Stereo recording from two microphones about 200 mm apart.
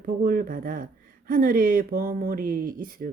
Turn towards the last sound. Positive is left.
turn(degrees=-45)  # may be behind; listen again after turning